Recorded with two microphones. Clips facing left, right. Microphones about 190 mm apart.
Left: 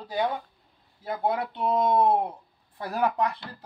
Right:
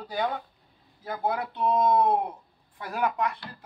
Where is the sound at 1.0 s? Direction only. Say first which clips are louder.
Left 2 dB; 25° left (ahead or behind).